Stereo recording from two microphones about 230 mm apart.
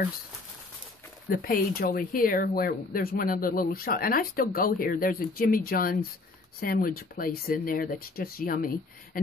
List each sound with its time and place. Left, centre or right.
1.3 s speech: left